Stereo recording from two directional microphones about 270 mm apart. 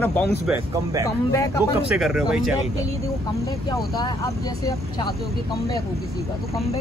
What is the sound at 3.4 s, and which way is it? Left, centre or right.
Speech, centre.